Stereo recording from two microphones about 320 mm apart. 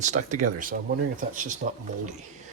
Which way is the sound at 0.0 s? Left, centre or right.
Right.